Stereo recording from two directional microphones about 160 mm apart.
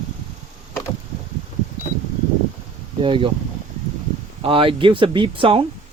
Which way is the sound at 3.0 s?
30° right (ahead or behind).